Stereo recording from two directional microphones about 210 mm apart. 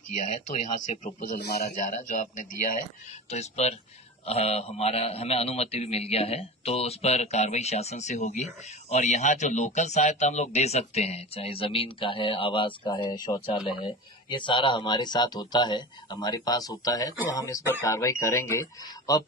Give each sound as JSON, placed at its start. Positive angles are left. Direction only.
{"t": 0.1, "sound": "a man's voice", "side_deg": 35}